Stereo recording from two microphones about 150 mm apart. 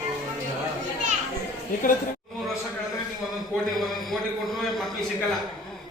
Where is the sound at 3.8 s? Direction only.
Centre (ahead or behind).